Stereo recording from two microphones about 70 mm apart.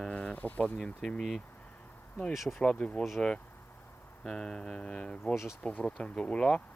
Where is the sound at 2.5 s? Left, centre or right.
Centre.